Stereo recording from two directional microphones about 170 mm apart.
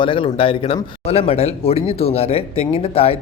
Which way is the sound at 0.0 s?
30° left (ahead or behind).